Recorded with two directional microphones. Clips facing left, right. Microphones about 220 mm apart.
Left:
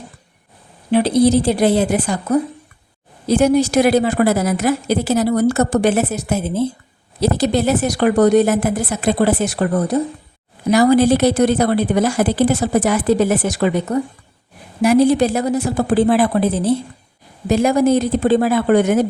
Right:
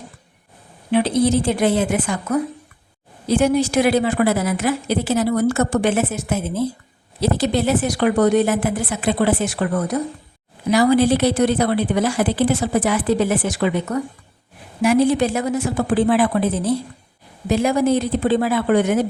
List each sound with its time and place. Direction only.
0.9 s a woman's voice: 40° left (ahead or behind)
10.7 s a woman's voice: 45° left (ahead or behind)